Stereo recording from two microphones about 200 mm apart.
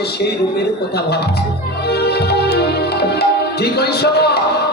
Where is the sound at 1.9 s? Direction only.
55° left (ahead or behind).